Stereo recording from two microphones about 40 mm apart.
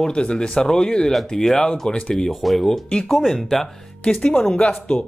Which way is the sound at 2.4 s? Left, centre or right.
Centre.